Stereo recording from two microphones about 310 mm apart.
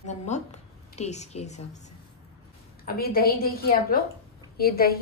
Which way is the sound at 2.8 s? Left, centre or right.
Left.